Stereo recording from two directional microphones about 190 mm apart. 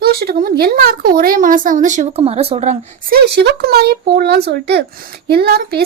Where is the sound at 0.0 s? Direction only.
55° right (ahead or behind); by 2.7 s 35° right (ahead or behind).